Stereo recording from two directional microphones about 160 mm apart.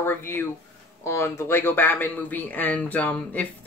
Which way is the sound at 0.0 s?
15° left (ahead or behind).